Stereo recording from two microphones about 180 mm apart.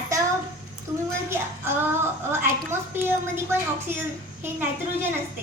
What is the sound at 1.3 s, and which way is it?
Child singing, 15° right (ahead or behind).